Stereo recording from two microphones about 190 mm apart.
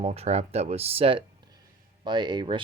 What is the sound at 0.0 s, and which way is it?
Speech, 35° right (ahead or behind).